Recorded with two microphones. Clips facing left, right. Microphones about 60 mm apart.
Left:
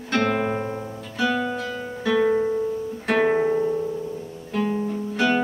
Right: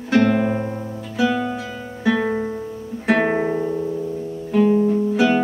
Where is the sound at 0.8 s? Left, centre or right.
Centre.